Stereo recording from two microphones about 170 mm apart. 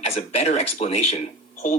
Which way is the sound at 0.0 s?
40° left (ahead or behind).